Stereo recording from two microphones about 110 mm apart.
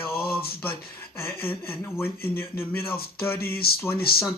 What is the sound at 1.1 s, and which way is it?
Speech, 20° left (ahead or behind).